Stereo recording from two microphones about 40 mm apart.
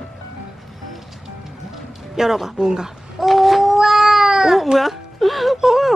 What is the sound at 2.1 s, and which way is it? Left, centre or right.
Speech, centre.